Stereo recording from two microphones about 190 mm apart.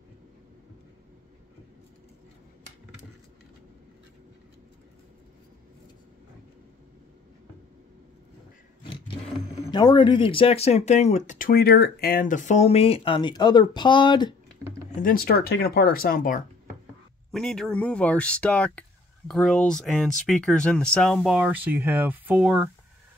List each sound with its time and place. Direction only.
9.7 s speech: 20° left (ahead or behind)
14.9 s speech: 45° left (ahead or behind)
17.3 s speech: 5° left (ahead or behind)